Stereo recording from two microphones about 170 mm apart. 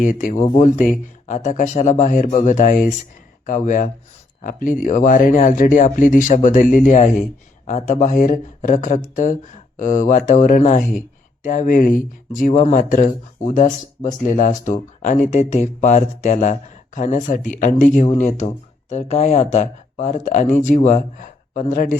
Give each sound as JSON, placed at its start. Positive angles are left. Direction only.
{"t": 0.0, "sound": "speech", "side_deg": 50}